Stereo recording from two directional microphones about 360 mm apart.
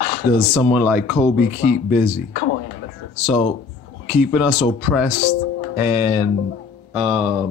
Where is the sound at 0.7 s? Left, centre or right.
Centre.